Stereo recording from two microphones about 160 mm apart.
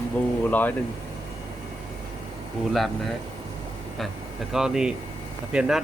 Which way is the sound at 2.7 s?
Centre (ahead or behind).